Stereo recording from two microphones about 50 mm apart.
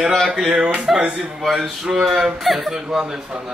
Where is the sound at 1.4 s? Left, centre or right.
Centre.